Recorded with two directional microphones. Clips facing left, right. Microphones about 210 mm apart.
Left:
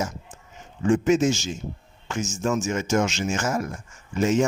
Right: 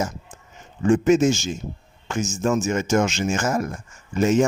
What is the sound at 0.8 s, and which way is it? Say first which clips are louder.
A man's voice: right 3 dB; 50° right (ahead or behind).